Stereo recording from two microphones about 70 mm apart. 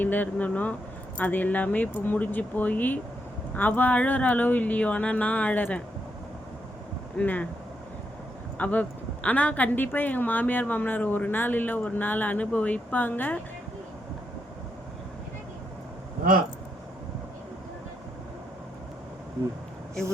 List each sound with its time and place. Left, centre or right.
0.0 s speech: left
7.2 s speech: left
8.5 s speech: left